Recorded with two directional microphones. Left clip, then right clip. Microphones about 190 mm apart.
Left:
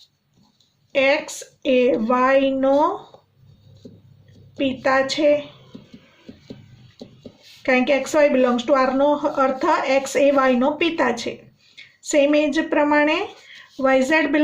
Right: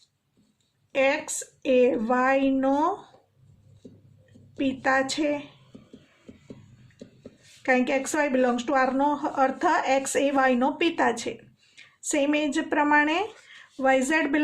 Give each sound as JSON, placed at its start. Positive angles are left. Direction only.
{"t": 0.9, "sound": "speech", "side_deg": -45}
{"t": 4.5, "sound": "speech", "side_deg": -45}
{"t": 7.6, "sound": "a woman's voice", "side_deg": -45}